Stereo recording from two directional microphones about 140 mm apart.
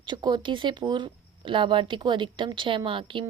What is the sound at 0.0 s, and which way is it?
Speech, 30° right (ahead or behind).